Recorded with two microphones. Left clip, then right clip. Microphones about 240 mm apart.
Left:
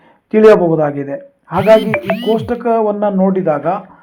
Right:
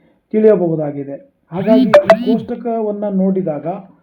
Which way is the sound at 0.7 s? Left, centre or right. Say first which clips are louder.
Left 6 dB; centre.